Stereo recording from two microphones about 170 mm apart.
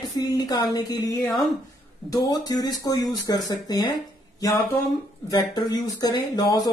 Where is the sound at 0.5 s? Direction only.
20° left (ahead or behind).